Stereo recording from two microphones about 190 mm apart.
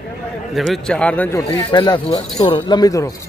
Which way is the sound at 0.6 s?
5° left (ahead or behind).